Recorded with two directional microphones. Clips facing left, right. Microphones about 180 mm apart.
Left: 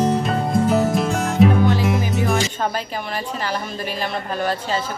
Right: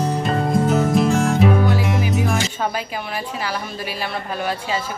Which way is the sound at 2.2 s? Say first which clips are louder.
Left 1 dB; 5° right (ahead or behind).